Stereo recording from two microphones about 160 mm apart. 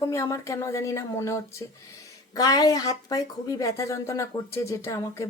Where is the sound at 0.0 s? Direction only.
20° left (ahead or behind).